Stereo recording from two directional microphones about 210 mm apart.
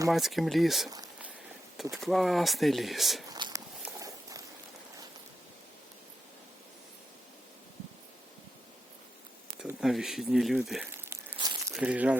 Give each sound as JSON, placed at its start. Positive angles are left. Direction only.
{"t": 0.1, "sound": "speech", "side_deg": 0}
{"t": 0.9, "sound": "speech", "side_deg": -15}
{"t": 1.8, "sound": "speech", "side_deg": 0}
{"t": 3.2, "sound": "a sound", "side_deg": -20}
{"t": 3.8, "sound": "walk", "side_deg": -15}
{"t": 9.6, "sound": "speech", "side_deg": 0}
{"t": 10.9, "sound": "a sound", "side_deg": -10}
{"t": 11.3, "sound": "crumpling", "side_deg": -20}
{"t": 11.7, "sound": "speech", "side_deg": -5}